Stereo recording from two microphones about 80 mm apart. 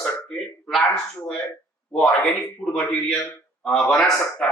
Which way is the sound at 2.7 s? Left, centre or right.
Centre.